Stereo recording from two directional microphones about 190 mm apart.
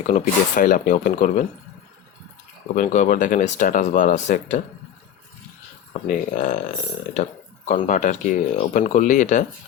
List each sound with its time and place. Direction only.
0.1 s speech: 45° left (ahead or behind)
2.7 s speech: 40° left (ahead or behind)
5.9 s speech: 40° left (ahead or behind)
7.7 s speech: 40° left (ahead or behind)